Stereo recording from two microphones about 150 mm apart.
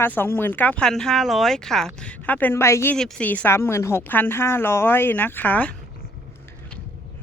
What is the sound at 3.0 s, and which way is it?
A woman's voice, 5° left (ahead or behind).